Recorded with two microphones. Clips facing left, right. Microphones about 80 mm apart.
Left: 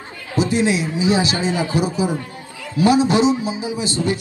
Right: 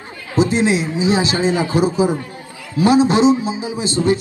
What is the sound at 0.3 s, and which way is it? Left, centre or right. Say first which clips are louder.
A man's voice: right 2 dB; right.